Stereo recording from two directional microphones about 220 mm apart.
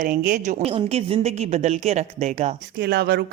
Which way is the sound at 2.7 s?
50° right (ahead or behind).